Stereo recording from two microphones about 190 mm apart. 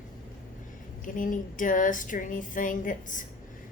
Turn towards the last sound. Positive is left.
turn(degrees=45)  # may be behind; listen again after turning